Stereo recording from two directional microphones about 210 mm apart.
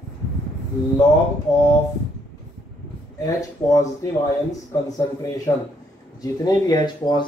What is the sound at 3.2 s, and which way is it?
Speech, 15° left (ahead or behind).